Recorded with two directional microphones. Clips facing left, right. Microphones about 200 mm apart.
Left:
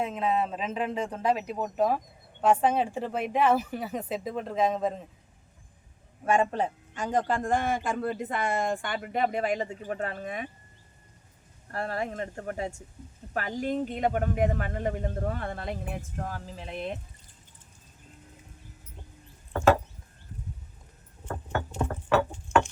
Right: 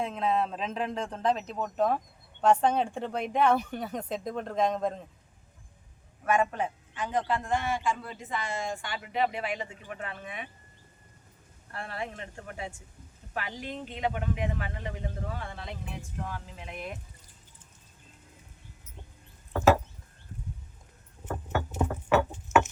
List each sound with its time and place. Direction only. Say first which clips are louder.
0.0 s speech: left 1 dB; 5° left (ahead or behind)
6.2 s a man's voice: left 2 dB; 30° left (ahead or behind)
11.7 s a man's voice: left 6 dB; 40° left (ahead or behind)
21.2 s vehicle: even; 5° right (ahead or behind)
22.4 s a sound: right 1 dB; 5° right (ahead or behind)